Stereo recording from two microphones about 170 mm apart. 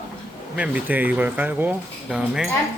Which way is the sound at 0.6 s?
10° right (ahead or behind).